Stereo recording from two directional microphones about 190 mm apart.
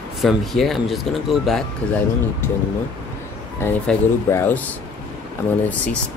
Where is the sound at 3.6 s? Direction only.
10° left (ahead or behind).